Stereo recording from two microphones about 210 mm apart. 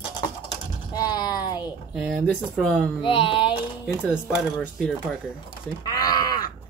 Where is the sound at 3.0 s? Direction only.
25° left (ahead or behind).